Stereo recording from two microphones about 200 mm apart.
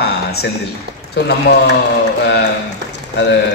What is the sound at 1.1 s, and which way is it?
Speech, 55° left (ahead or behind).